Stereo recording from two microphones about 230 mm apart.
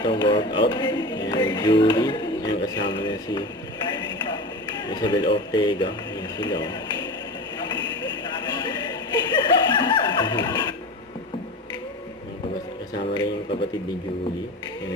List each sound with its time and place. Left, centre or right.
0.0 s speech: centre
4.9 s speech: centre
9.1 s music: centre
12.9 s a sound: centre